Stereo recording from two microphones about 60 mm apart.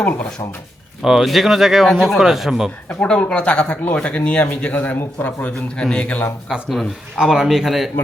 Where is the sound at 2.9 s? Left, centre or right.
Centre.